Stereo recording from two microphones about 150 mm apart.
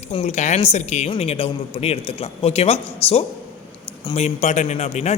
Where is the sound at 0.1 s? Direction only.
45° left (ahead or behind).